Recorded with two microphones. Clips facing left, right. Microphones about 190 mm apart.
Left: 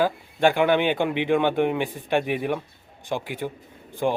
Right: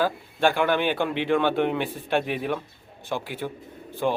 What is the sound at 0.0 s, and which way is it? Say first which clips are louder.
Speech: left 2 dB; 15° left (ahead or behind).